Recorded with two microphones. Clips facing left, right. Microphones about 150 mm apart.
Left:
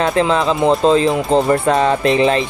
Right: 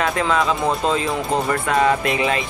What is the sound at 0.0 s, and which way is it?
Speech, 30° left (ahead or behind).